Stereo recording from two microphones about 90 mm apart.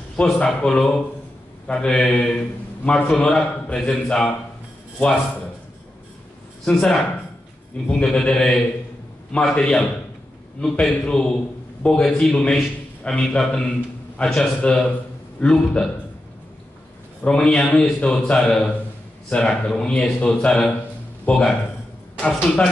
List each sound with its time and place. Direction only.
0.1 s a man's voice: 10° left (ahead or behind)
6.6 s a man's voice: 5° left (ahead or behind)
17.2 s a man's voice: 10° left (ahead or behind)